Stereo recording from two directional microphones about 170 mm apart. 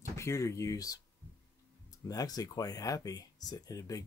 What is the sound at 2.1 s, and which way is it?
Speech, 20° left (ahead or behind).